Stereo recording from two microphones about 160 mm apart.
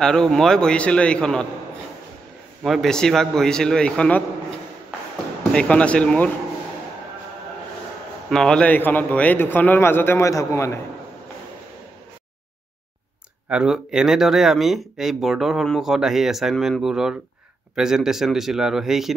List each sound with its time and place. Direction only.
0.0 s speech: 5° left (ahead or behind)
2.6 s speech: centre (ahead or behind)
5.5 s a man's voice: 5° left (ahead or behind)
8.3 s a man's voice: 5° left (ahead or behind)
13.5 s speech: 5° right (ahead or behind)